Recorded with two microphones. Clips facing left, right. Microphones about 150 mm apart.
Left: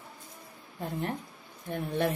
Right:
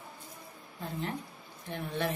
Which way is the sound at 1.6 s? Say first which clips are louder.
Left 4 dB; 50° left (ahead or behind).